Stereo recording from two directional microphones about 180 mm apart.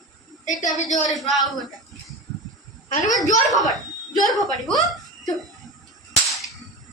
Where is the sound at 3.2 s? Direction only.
45° left (ahead or behind).